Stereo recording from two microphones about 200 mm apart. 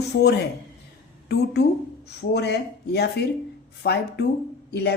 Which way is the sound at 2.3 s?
55° left (ahead or behind).